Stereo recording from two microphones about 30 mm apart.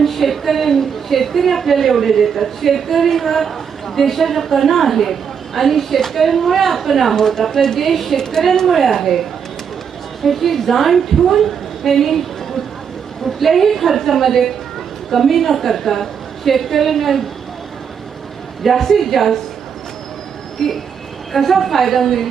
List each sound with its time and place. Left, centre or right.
0.0 s a woman's voice: centre
7.2 s a woman's voice: centre
8.2 s speech: centre
8.6 s a woman's voice: centre
10.2 s a woman's voice: centre
13.4 s a woman's voice: centre
18.6 s a woman's voice: centre
20.6 s speech: centre
21.3 s a woman's voice: centre